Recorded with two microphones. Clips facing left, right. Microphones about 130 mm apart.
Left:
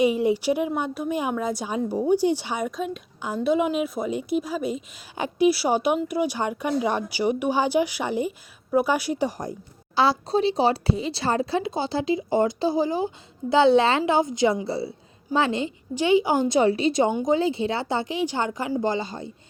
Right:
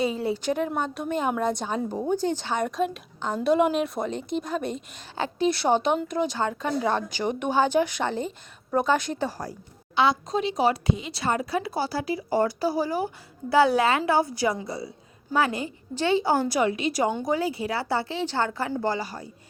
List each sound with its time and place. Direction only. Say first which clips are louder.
0.0 s a woman's voice: left 5 dB; 15° left (ahead or behind)
9.9 s speech: left 2 dB; 35° left (ahead or behind)
16.0 s speech: left 3 dB; 15° left (ahead or behind)
16.6 s speech: left 4 dB; 30° left (ahead or behind)